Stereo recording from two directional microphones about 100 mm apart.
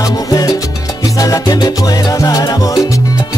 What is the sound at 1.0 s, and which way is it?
Salsa music, 35° left (ahead or behind).